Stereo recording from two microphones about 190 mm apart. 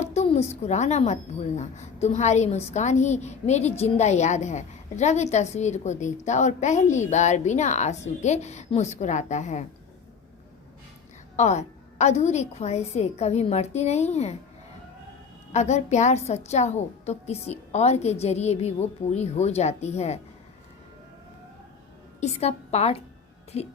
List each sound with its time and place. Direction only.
0.0 s a woman's voice: 35° left (ahead or behind)
11.3 s a woman's voice: 35° left (ahead or behind)
15.5 s a woman's voice: 35° left (ahead or behind)
22.2 s a woman's voice: 35° left (ahead or behind)